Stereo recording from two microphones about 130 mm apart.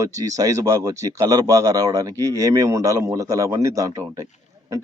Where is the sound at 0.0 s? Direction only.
25° right (ahead or behind).